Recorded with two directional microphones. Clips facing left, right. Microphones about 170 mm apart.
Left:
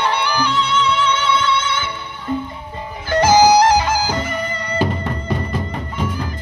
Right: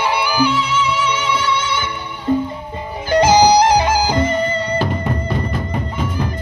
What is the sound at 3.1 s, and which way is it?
Music, 15° right (ahead or behind).